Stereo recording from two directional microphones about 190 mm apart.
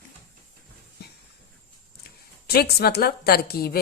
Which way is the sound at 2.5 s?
55° left (ahead or behind).